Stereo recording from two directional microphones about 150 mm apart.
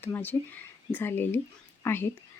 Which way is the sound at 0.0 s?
15° left (ahead or behind).